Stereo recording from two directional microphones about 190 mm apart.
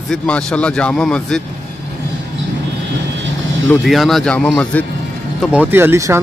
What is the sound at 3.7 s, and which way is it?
Speech, centre (ahead or behind).